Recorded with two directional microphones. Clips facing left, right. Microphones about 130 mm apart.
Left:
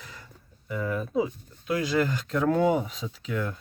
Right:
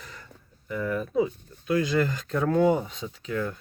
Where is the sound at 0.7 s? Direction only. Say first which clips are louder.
Right 1 dB; 10° left (ahead or behind).